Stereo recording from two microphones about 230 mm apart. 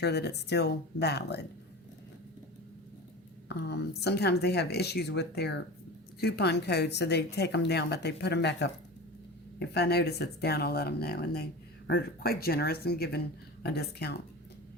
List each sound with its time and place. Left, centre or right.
0.0 s a woman's voice: left
3.5 s a woman's voice: left